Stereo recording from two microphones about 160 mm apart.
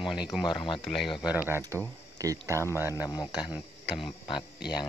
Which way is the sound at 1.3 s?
10° right (ahead or behind).